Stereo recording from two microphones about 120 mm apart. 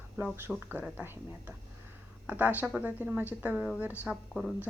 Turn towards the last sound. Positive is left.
turn(degrees=0)  # may be behind; listen again after turning